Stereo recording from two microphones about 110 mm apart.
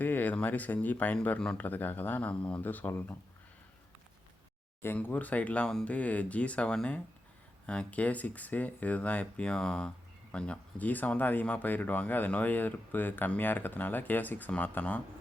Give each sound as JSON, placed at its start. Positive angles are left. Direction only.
{"t": 0.0, "sound": "speech", "side_deg": 15}
{"t": 4.8, "sound": "speech", "side_deg": 20}